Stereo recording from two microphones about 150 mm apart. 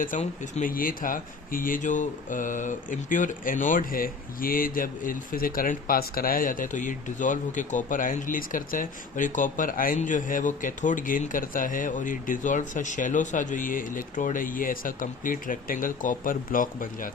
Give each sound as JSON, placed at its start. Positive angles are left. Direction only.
{"t": 0.0, "sound": "speech", "side_deg": 55}
{"t": 0.7, "sound": "speech", "side_deg": 70}